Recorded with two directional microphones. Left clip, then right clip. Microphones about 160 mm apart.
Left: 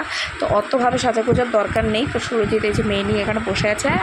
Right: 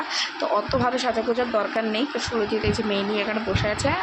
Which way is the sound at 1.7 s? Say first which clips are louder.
Left 5 dB; 30° left (ahead or behind).